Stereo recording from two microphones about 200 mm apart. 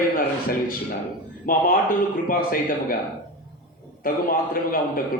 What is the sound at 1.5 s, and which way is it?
Speech, 45° left (ahead or behind).